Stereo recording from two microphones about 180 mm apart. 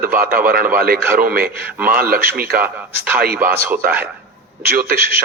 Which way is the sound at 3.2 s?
55° right (ahead or behind).